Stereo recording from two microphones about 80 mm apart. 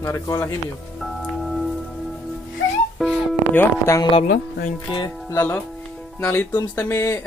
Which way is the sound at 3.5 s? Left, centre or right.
Left.